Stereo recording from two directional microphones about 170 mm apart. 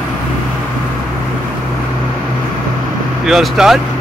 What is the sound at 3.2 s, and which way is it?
Speech, 5° right (ahead or behind).